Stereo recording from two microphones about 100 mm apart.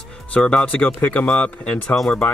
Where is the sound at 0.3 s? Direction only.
10° left (ahead or behind).